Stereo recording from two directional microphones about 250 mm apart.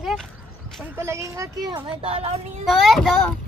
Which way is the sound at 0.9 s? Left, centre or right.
Centre.